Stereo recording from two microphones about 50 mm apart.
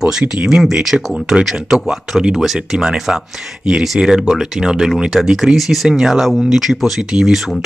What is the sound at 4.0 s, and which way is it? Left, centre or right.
Speech, centre.